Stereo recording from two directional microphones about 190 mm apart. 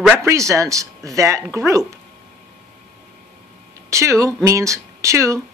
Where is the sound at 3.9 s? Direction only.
15° right (ahead or behind).